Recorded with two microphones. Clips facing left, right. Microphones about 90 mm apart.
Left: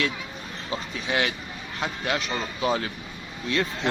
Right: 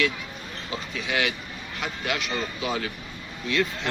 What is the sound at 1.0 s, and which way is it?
A man's voice, 30° left (ahead or behind).